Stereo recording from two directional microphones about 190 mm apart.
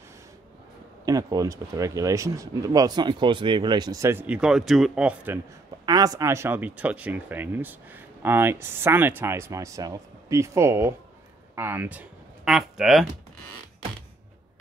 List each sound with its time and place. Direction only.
1.0 s speech: 20° right (ahead or behind)
5.9 s speech: 20° right (ahead or behind); by 13.1 s centre (ahead or behind)